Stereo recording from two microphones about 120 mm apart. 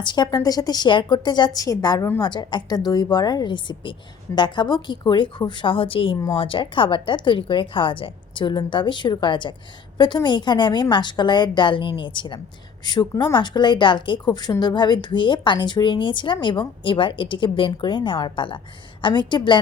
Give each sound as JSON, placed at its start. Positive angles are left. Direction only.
{"t": 0.0, "sound": "a woman's voice", "side_deg": 40}